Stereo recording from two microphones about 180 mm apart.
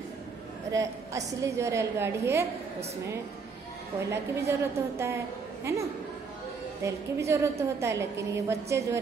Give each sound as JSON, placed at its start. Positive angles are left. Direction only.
{"t": 0.7, "sound": "a woman's voice", "side_deg": -20}
{"t": 4.1, "sound": "a woman's voice", "side_deg": -15}
{"t": 6.8, "sound": "a woman's voice", "side_deg": -15}